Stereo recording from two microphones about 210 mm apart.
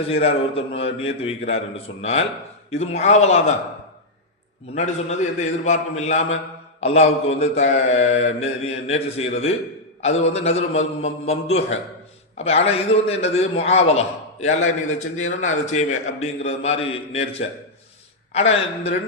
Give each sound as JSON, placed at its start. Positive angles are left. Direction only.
{"t": 0.1, "sound": "a man's voice", "side_deg": 30}
{"t": 4.7, "sound": "a man's voice", "side_deg": 30}
{"t": 18.3, "sound": "a man's voice", "side_deg": 30}